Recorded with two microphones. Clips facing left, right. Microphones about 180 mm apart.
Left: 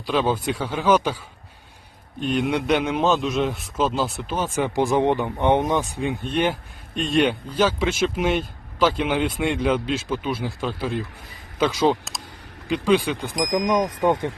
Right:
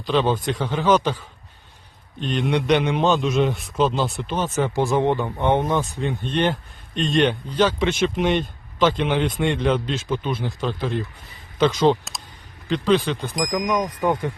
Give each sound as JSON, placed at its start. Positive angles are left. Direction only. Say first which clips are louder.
{"t": 0.0, "sound": "a man's voice", "louder": "right 1 dB", "side_deg": 10}
{"t": 2.2, "sound": "a man's voice", "louder": "even", "side_deg": 10}
{"t": 13.4, "sound": "speech", "louder": "left 2 dB", "side_deg": 25}